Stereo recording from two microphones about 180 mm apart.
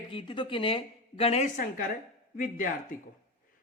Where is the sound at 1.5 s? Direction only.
50° left (ahead or behind).